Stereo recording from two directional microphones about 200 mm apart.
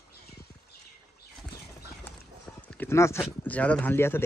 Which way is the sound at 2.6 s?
10° left (ahead or behind).